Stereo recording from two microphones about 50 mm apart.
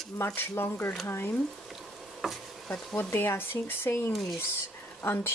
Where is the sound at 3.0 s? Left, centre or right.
Left.